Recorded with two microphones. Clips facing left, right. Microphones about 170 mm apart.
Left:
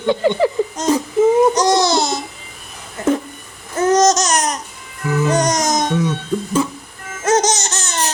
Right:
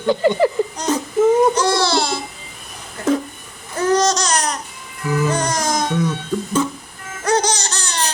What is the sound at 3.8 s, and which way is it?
Babbling, 20° left (ahead or behind).